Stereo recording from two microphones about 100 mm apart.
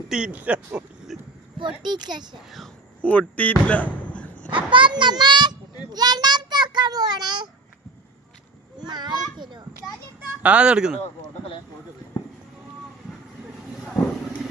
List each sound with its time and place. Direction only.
0.1 s speech: 10° right (ahead or behind)
1.5 s a child's voice: 50° right (ahead or behind)
3.0 s speech: 15° left (ahead or behind)
4.5 s a child's voice: 55° right (ahead or behind)
8.9 s a child's voice: 45° right (ahead or behind)
10.4 s speech: 10° right (ahead or behind)